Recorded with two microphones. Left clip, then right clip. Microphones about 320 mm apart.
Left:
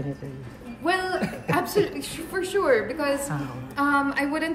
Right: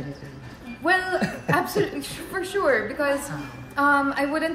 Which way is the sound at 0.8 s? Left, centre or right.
Centre.